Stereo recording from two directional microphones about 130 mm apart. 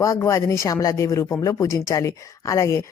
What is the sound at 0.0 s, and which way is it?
Speech, 25° left (ahead or behind).